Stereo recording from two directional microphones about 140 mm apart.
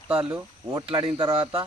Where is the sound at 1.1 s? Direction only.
40° right (ahead or behind).